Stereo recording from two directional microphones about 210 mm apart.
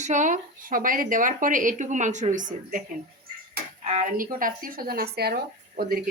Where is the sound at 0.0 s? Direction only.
35° right (ahead or behind).